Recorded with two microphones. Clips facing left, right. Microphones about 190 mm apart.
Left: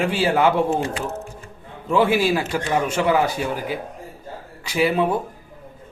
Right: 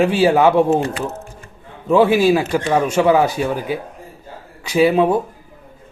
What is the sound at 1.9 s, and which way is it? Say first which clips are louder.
Speech: right 5 dB; 25° right (ahead or behind).